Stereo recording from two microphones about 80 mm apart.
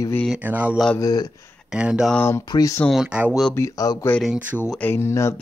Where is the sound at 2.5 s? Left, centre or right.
Left.